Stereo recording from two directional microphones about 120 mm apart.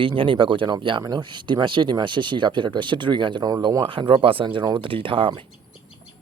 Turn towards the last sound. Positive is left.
turn(degrees=-45)  # may be behind; listen again after turning